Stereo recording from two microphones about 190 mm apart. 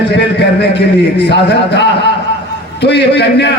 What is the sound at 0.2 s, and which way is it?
A man's voice, 65° left (ahead or behind).